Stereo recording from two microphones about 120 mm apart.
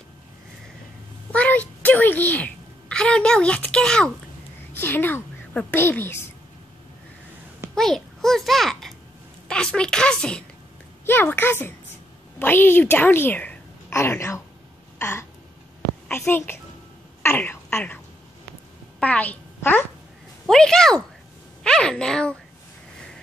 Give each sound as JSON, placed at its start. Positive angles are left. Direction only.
{"t": 1.3, "sound": "a sound", "side_deg": 10}
{"t": 4.7, "sound": "a woman's voice", "side_deg": 15}
{"t": 5.5, "sound": "a woman's voice", "side_deg": 5}
{"t": 5.8, "sound": "a child's voice", "side_deg": 20}
{"t": 7.7, "sound": "a child's voice", "side_deg": 5}
{"t": 15.0, "sound": "a sound", "side_deg": 25}
{"t": 16.1, "sound": "a child's voice", "side_deg": 20}
{"t": 20.4, "sound": "a woman's voice", "side_deg": 5}